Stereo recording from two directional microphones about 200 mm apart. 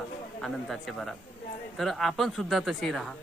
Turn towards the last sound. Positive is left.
turn(degrees=0)  # may be behind; listen again after turning